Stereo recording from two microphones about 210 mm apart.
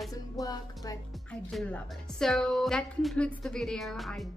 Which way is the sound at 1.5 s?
5° left (ahead or behind).